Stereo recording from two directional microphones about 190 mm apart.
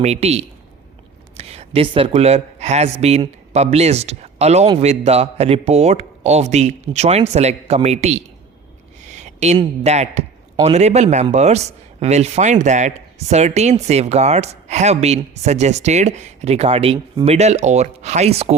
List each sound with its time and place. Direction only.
0.0 s a man's voice: 35° right (ahead or behind)
9.0 s a sound: 40° right (ahead or behind)
9.8 s a man's voice: 35° right (ahead or behind)